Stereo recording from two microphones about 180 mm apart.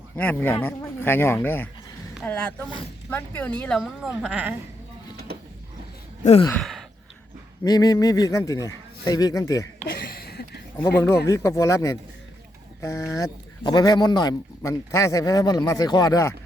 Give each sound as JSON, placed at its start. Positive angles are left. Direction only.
{"t": 0.2, "sound": "speech", "side_deg": 10}
{"t": 6.2, "sound": "speech", "side_deg": 40}
{"t": 6.6, "sound": "sigh", "side_deg": 0}
{"t": 7.6, "sound": "speech", "side_deg": 20}
{"t": 9.8, "sound": "a sound", "side_deg": 55}
{"t": 11.3, "sound": "speech", "side_deg": 15}